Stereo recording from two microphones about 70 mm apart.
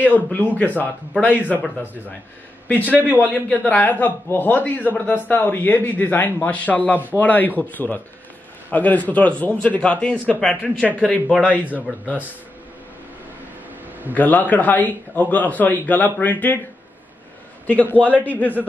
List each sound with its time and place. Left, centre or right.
0.0 s a man's voice: left
2.8 s a man's voice: right
3.3 s a man's voice: left
14.1 s a man's voice: left
17.6 s a man's voice: left